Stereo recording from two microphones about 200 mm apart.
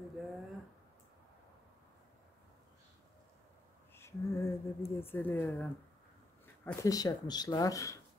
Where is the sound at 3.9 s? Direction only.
15° left (ahead or behind).